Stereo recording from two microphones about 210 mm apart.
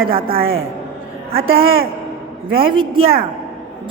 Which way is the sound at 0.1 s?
25° right (ahead or behind).